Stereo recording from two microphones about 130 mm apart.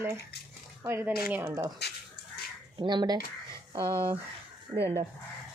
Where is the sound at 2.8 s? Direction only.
35° right (ahead or behind).